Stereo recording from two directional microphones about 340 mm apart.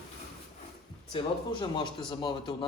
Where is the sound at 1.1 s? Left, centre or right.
Centre.